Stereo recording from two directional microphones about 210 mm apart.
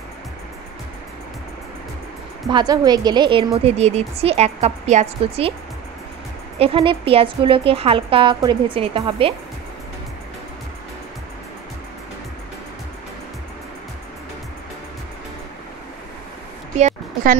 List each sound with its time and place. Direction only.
2.5 s a woman's voice: 20° right (ahead or behind)
6.6 s a woman's voice: 25° right (ahead or behind)
16.7 s a sound: 35° right (ahead or behind)